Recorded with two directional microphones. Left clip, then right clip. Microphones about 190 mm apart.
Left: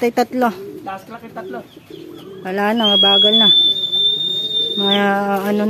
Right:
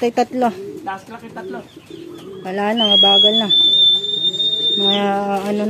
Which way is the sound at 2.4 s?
10° left (ahead or behind).